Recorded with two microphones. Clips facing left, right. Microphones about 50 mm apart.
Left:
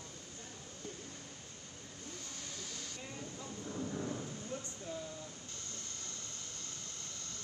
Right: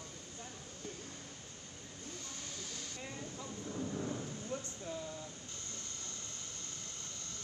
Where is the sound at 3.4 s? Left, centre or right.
Centre.